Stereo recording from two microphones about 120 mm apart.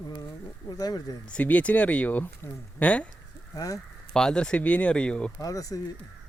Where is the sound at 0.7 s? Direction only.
30° left (ahead or behind).